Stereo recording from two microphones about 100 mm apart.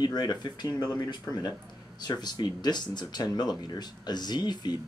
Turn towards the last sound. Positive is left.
turn(degrees=45)  # may be behind; listen again after turning